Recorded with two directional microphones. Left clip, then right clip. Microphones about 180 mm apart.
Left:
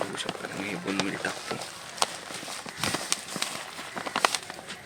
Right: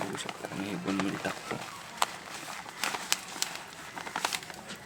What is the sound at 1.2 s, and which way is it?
Speech, 15° right (ahead or behind).